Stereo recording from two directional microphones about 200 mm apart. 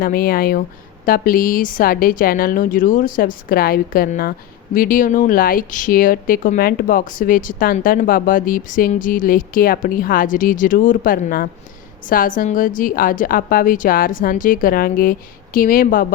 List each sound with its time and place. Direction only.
0.0 s speech: 45° left (ahead or behind)